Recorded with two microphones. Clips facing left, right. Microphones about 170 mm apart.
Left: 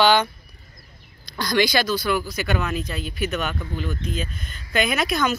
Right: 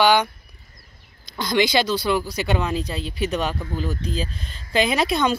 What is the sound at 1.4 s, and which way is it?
Speech, 25° right (ahead or behind).